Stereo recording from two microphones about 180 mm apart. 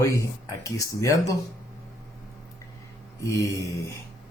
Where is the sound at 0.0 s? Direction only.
15° left (ahead or behind).